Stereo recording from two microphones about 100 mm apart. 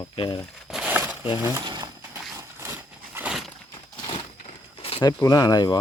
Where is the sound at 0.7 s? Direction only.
10° right (ahead or behind).